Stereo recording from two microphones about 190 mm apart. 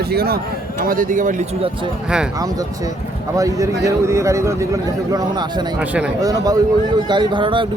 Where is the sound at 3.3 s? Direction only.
15° right (ahead or behind).